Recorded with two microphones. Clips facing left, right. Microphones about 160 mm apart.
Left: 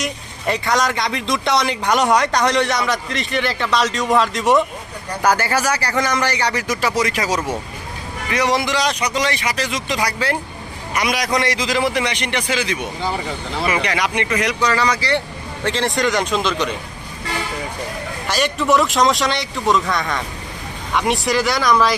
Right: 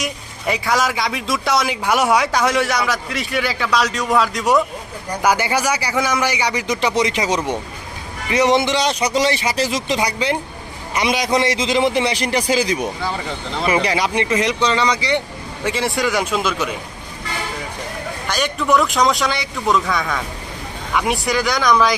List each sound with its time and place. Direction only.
0.0 s speech: centre (ahead or behind)
5.2 s a man's voice: 10° right (ahead or behind)
18.3 s speech: centre (ahead or behind)